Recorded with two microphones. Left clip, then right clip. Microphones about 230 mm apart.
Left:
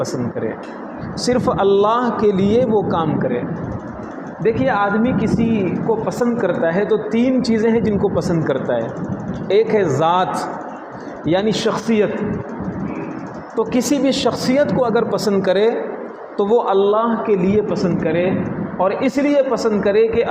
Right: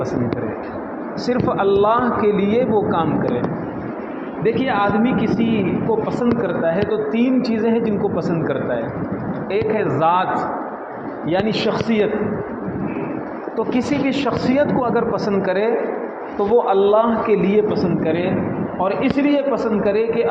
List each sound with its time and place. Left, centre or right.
1.2 s speech: left
4.4 s a man's voice: left
11.3 s a man's voice: left
13.6 s a man's voice: left